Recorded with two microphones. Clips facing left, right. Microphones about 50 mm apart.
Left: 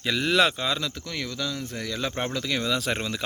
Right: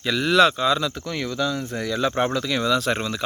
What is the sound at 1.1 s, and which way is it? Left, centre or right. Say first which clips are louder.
Speech: right 7 dB; right.